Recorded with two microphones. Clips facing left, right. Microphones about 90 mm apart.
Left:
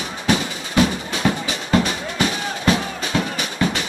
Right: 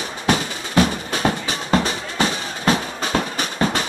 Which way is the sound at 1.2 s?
35° right (ahead or behind).